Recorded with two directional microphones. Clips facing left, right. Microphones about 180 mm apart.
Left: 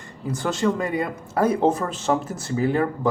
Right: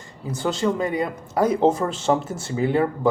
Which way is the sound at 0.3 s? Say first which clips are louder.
Even; 25° right (ahead or behind).